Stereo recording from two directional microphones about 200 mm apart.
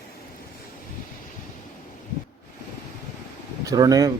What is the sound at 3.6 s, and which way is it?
Speech, 20° right (ahead or behind).